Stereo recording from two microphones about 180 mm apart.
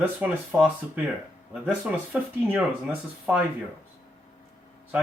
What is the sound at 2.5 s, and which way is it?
Speech, 5° right (ahead or behind).